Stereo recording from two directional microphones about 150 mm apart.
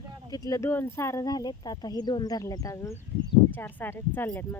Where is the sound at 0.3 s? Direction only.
25° left (ahead or behind).